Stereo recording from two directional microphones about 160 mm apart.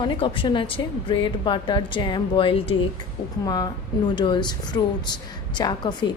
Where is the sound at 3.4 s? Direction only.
25° left (ahead or behind).